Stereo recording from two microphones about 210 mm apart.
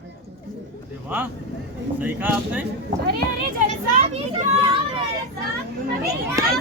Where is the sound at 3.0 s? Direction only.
50° right (ahead or behind).